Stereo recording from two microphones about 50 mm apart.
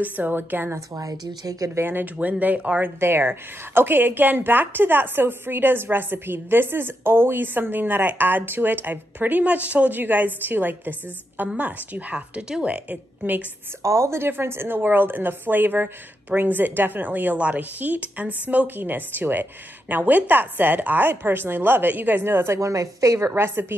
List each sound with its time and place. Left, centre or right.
0.0 s a woman's voice: right
1.8 s speech: right
2.1 s a woman's voice: right
3.0 s a woman's voice: right
13.8 s speech: right
14.2 s a woman's voice: right
22.2 s a woman's voice: right
22.6 s a woman's voice: right
23.5 s a woman's voice: right